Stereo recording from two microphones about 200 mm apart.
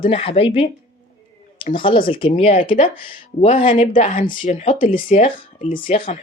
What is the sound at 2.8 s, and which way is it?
Speech, 45° left (ahead or behind).